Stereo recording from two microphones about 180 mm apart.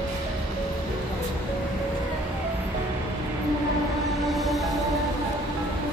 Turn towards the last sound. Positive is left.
turn(degrees=0)  # may be behind; listen again after turning